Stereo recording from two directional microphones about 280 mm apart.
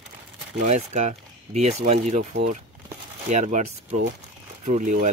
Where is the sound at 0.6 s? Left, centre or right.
Right.